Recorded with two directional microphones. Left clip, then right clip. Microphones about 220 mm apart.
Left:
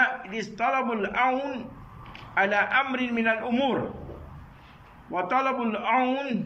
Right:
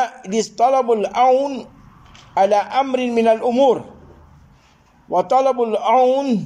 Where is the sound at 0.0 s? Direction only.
35° right (ahead or behind).